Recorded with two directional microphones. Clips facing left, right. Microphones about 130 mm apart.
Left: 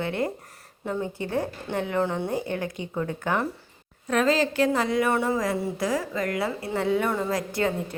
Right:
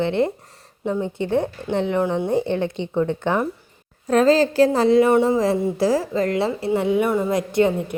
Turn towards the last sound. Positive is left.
turn(degrees=-20)  # may be behind; listen again after turning